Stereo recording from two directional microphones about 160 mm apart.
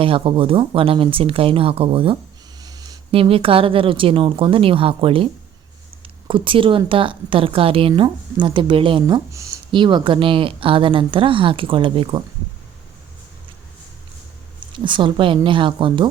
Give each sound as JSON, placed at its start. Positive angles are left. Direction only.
{"t": 0.0, "sound": "speech", "side_deg": -35}
{"t": 2.6, "sound": "a sound", "side_deg": -25}
{"t": 3.1, "sound": "speech", "side_deg": -35}
{"t": 14.7, "sound": "speech", "side_deg": -30}